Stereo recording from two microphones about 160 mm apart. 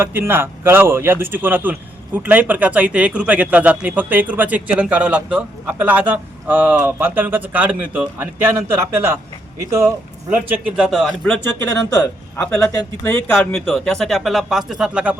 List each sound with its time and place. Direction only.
0.0 s a man's voice: 15° right (ahead or behind)
11.9 s a man's voice: 20° left (ahead or behind); by 15.1 s 5° right (ahead or behind)